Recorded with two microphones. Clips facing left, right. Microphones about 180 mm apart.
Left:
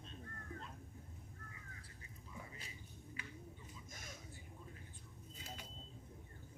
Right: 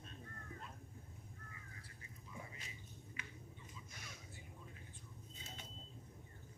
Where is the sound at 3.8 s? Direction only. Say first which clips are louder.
Left 2 dB; 45° left (ahead or behind).